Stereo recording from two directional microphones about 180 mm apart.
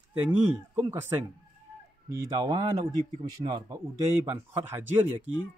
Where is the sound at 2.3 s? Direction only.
20° right (ahead or behind).